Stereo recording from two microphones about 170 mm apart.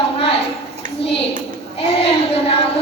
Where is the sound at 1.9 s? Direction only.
35° left (ahead or behind).